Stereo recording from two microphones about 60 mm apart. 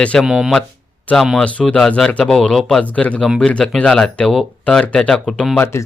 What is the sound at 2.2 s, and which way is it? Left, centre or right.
Speech, centre.